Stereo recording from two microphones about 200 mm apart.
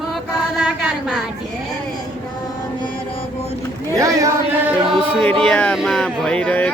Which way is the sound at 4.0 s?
15° right (ahead or behind).